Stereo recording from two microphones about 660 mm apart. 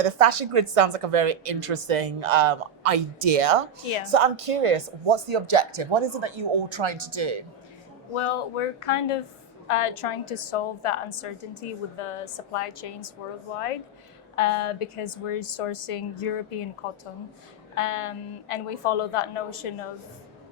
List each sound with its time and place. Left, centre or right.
0.0 s a woman's voice: right
8.1 s a woman's voice: left
14.3 s a woman's voice: left
17.7 s a woman's voice: left